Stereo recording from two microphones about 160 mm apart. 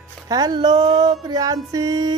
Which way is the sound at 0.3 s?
25° right (ahead or behind).